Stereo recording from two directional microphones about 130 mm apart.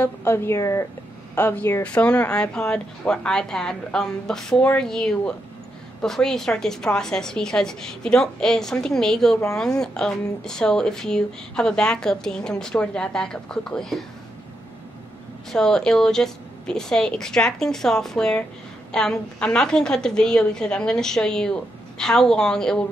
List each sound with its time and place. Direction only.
0.0 s a woman's voice: 20° left (ahead or behind); by 14.0 s 5° left (ahead or behind)
15.5 s speech: 5° left (ahead or behind)